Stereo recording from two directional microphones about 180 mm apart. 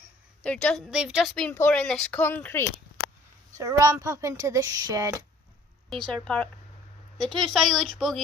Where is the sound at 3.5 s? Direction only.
20° right (ahead or behind).